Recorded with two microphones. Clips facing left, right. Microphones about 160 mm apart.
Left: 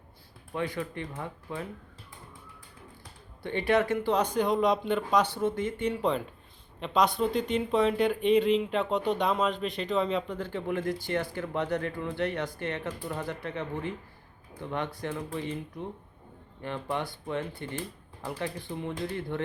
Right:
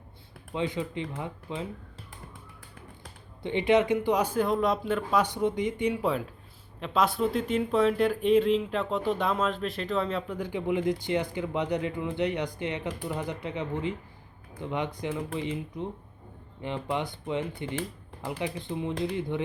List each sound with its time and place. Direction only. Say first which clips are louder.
0.5 s speech: right 2 dB; 20° right (ahead or behind)
3.4 s speech: right 3 dB; 20° right (ahead or behind); by 5.2 s 5° right (ahead or behind)
5.2 s speech: right 1 dB; 15° right (ahead or behind)
10.3 s speech: right 3 dB; 15° right (ahead or behind)